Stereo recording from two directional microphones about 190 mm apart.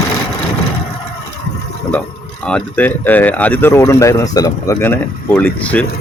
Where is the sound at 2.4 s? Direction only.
5° left (ahead or behind).